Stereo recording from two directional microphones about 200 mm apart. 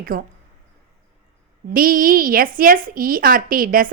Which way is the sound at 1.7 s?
45° right (ahead or behind).